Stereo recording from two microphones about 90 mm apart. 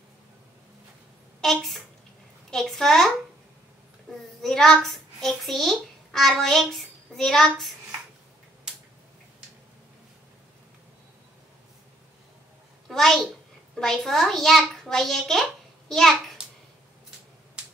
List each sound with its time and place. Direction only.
1.4 s a child's voice: centre (ahead or behind)
4.1 s a child's voice: 5° left (ahead or behind)
12.8 s a child's voice: 5° left (ahead or behind)